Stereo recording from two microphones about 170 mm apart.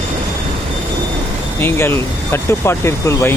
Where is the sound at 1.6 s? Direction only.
15° left (ahead or behind).